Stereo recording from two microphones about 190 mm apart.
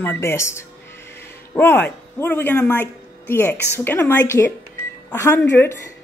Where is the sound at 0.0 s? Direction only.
10° left (ahead or behind).